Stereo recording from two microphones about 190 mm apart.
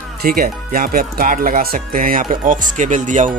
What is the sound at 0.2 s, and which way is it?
Speech, 50° right (ahead or behind).